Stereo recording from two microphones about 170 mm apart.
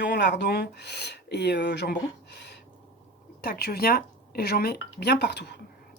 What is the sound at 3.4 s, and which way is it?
Speech, 65° left (ahead or behind).